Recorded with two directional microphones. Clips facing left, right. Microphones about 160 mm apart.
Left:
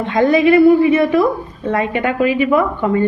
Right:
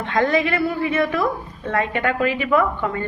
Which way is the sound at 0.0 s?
15° left (ahead or behind).